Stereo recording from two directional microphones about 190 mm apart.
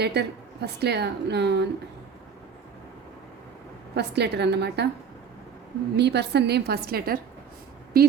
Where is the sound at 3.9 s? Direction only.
60° right (ahead or behind).